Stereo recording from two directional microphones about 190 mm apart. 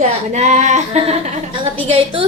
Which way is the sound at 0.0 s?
35° right (ahead or behind).